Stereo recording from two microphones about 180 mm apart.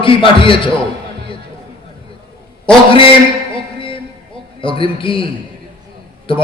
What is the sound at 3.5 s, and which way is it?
Music, 30° left (ahead or behind).